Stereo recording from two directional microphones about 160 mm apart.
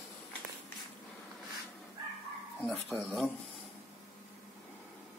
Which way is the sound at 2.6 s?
10° left (ahead or behind).